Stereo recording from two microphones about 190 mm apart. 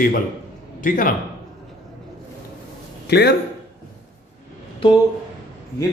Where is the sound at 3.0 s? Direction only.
55° left (ahead or behind).